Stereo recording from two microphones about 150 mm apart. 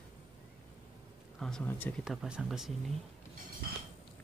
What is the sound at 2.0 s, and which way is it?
Speech, 5° right (ahead or behind).